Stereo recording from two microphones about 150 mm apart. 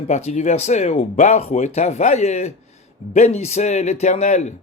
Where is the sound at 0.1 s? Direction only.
45° left (ahead or behind).